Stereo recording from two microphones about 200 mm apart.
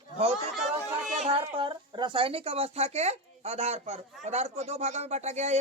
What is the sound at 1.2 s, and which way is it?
Speech, 25° right (ahead or behind).